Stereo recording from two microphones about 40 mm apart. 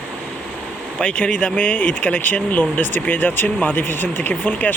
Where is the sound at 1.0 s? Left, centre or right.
Left.